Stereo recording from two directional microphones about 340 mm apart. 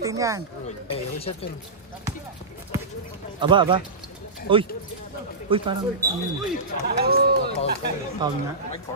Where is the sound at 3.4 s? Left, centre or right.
Centre.